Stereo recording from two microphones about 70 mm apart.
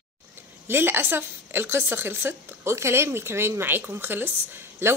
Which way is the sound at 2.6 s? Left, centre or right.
Right.